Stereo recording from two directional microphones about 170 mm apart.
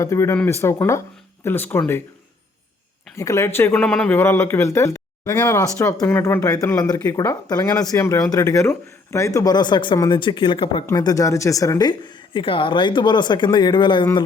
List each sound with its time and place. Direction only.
0.0 s speech: 15° left (ahead or behind)
3.2 s a woman's voice: 15° left (ahead or behind)